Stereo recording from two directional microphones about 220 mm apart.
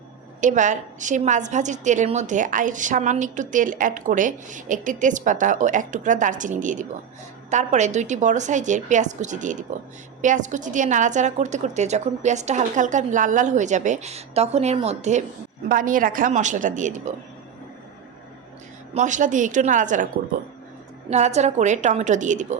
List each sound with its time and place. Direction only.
0.4 s a woman's voice: 35° right (ahead or behind)
18.9 s a woman's voice: 35° right (ahead or behind)
21.1 s a woman's voice: 30° right (ahead or behind)